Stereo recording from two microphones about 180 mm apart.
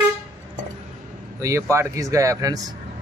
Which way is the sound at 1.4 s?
15° right (ahead or behind).